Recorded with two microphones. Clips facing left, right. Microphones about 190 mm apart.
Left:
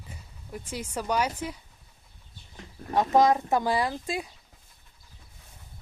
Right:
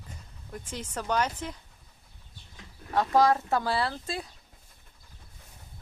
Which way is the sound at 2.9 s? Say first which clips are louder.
Left 2 dB; 20° left (ahead or behind).